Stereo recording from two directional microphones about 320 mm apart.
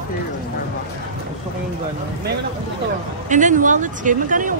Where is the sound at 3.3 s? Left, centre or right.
Right.